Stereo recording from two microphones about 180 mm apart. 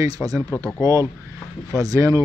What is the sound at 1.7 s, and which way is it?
Speech, 20° right (ahead or behind).